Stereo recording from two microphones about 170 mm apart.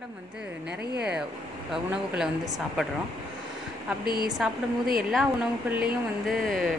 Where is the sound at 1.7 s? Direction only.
Centre (ahead or behind).